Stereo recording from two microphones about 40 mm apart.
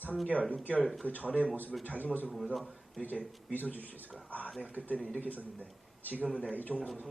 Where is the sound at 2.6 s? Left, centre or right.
Centre.